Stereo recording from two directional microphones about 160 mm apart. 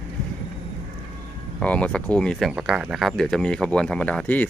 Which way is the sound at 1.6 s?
10° left (ahead or behind).